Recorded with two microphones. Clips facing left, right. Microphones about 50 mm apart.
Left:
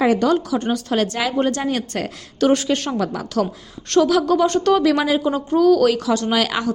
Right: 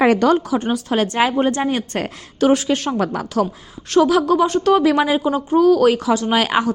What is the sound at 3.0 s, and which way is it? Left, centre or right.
Speech, right.